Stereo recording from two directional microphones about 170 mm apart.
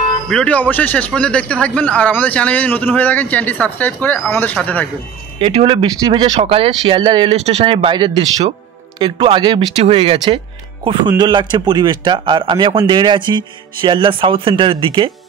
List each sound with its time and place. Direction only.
0.3 s a man's voice: 5° left (ahead or behind)
5.4 s speech: 35° right (ahead or behind)
7.3 s speech: 40° right (ahead or behind)